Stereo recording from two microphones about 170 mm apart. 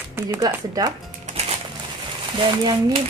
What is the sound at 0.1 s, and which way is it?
Speech, 20° right (ahead or behind).